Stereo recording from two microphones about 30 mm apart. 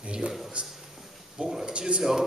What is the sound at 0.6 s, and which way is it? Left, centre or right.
Speech, right.